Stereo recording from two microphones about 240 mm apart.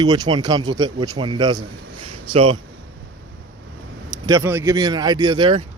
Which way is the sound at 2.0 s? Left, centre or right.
Right.